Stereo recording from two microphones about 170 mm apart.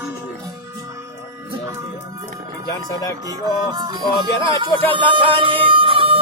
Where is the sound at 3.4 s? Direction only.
25° right (ahead or behind).